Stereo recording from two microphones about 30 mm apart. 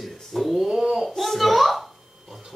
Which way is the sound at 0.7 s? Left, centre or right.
Right.